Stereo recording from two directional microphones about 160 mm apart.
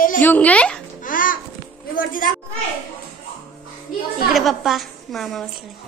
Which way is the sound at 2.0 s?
60° left (ahead or behind).